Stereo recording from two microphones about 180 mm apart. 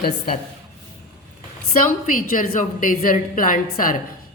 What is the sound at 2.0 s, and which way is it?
A woman's voice, 50° left (ahead or behind).